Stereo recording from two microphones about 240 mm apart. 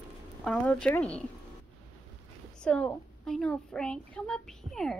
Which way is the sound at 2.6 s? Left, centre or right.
Centre.